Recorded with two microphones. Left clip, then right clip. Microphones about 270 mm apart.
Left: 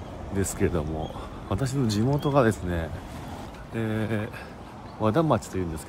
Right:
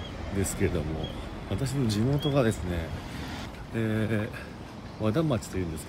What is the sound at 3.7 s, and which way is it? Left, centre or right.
Speech, centre.